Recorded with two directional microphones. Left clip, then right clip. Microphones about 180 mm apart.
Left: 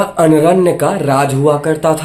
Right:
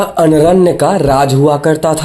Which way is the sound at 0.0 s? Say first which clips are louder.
Right 1 dB; 35° right (ahead or behind).